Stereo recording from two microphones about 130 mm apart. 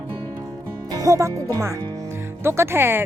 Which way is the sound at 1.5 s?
20° right (ahead or behind).